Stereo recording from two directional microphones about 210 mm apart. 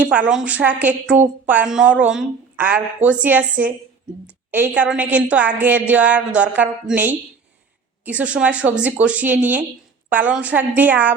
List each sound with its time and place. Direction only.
0.0 s speech: 5° right (ahead or behind)